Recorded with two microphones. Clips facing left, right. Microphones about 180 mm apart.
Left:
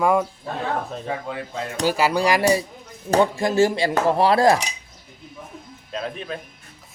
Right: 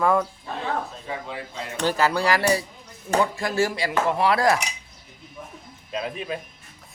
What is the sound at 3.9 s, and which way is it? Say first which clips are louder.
Cutlery: left 2 dB; 35° left (ahead or behind).